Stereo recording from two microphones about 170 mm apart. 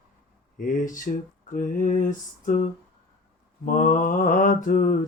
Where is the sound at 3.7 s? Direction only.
50° left (ahead or behind).